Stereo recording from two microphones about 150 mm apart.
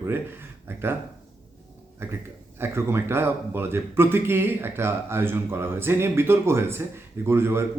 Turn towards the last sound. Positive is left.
turn(degrees=-15)  # may be behind; listen again after turning